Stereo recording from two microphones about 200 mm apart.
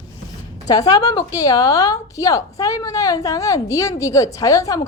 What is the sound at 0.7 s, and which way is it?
A woman's voice, 20° left (ahead or behind).